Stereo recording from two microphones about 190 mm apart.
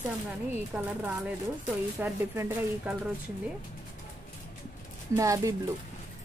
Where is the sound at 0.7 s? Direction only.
5° right (ahead or behind).